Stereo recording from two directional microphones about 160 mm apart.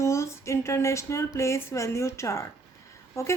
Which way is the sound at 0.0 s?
20° left (ahead or behind).